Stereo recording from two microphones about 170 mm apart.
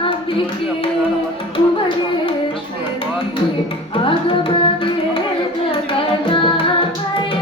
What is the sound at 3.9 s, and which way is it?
Tabla, 30° left (ahead or behind).